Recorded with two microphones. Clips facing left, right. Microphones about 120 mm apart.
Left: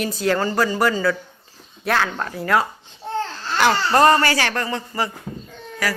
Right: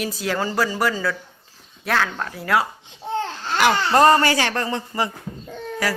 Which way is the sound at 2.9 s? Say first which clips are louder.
Even; 15° right (ahead or behind).